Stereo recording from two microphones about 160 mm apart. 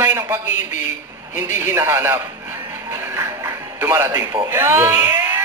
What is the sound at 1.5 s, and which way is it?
A man's voice, 15° right (ahead or behind).